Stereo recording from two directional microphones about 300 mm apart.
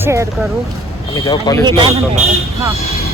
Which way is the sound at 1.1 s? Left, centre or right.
Centre.